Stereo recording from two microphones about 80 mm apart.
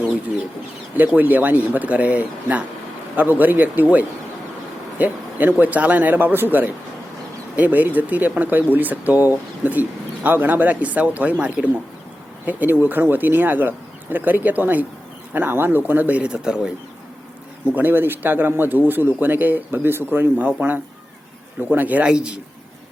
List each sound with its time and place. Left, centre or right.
0.9 s a man's voice: right
17.7 s a man's voice: right